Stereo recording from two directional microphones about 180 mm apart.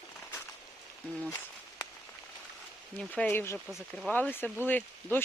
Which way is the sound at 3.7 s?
Centre (ahead or behind).